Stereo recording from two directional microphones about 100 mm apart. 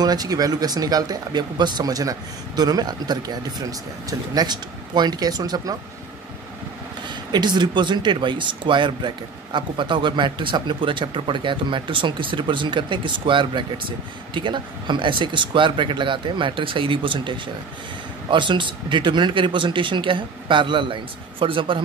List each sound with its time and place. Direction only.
0.0 s speech: 40° right (ahead or behind)
7.1 s speech: 50° right (ahead or behind)